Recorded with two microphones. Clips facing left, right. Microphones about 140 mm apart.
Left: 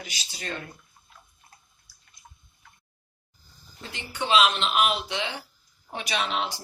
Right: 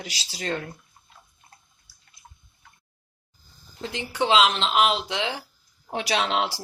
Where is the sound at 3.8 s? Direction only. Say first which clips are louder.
Right 7 dB; 90° right.